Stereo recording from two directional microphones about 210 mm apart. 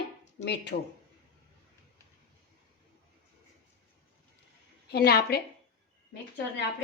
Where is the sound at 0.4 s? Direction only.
55° left (ahead or behind).